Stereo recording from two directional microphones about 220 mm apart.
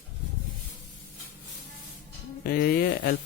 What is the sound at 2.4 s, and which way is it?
Speech, 45° left (ahead or behind).